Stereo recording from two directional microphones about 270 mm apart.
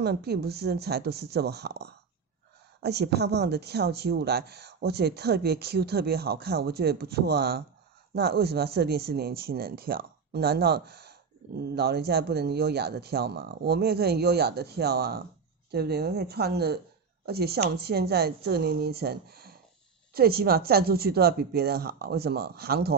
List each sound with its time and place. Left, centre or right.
0.0 s a woman's voice: right